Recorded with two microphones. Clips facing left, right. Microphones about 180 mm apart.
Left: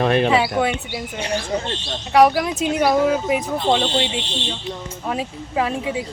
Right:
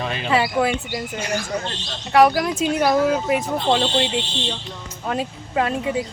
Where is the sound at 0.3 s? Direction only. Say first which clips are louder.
Left 1 dB; centre (ahead or behind).